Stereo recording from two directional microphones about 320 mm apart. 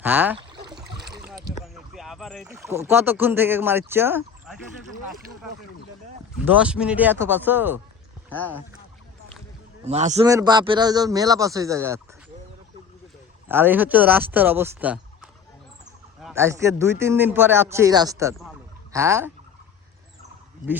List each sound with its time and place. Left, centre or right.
0.0 s a sound: centre
1.6 s speech: centre
6.4 s speech: centre
8.3 s speech: centre
9.8 s a man's voice: right
13.5 s a man's voice: centre